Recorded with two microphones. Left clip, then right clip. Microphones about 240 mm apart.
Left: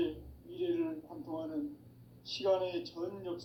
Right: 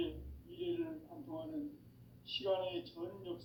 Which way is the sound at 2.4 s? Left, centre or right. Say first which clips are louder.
Left 6 dB; left.